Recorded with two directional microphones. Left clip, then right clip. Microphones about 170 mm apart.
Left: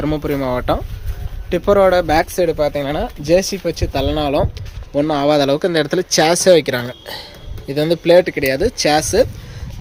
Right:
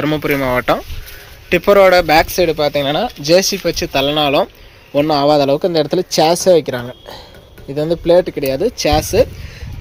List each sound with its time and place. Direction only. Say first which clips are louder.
0.0 s speech: right 3 dB; centre (ahead or behind)
5.5 s speech: right 2 dB; centre (ahead or behind)